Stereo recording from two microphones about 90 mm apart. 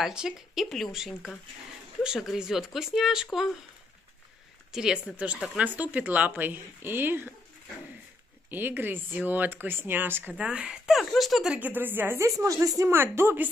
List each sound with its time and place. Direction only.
0.0 s speech: 5° right (ahead or behind)
4.7 s speech: 5° right (ahead or behind); by 7.3 s 20° right (ahead or behind)
8.5 s speech: 20° right (ahead or behind)
10.3 s speech: 10° right (ahead or behind)
11.6 s speech: 20° right (ahead or behind)
12.4 s speech: 35° right (ahead or behind)